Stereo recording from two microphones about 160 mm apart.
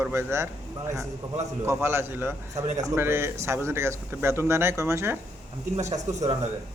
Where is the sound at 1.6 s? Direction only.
15° right (ahead or behind).